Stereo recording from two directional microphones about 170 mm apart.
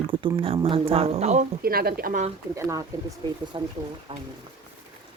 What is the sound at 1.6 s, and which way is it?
Speech, 60° right (ahead or behind).